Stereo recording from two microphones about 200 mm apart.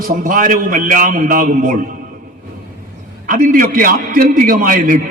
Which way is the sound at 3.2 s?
40° right (ahead or behind).